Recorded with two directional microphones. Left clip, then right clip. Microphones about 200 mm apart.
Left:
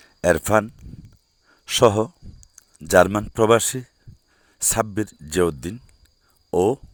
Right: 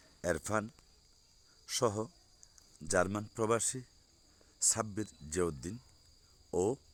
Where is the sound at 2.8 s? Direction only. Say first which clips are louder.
Left 17 dB; 40° left (ahead or behind).